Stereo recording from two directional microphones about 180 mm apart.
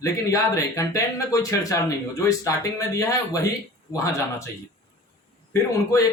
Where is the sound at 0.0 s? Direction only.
15° left (ahead or behind).